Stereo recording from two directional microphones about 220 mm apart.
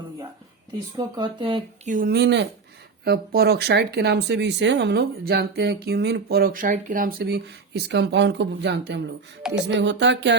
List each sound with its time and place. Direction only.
0.9 s speech: 20° right (ahead or behind); by 10.3 s 55° right (ahead or behind)